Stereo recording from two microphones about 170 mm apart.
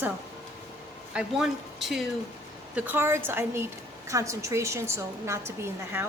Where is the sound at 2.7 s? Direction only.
10° right (ahead or behind).